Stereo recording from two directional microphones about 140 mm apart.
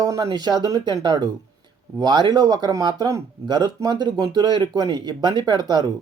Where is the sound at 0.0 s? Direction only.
25° right (ahead or behind).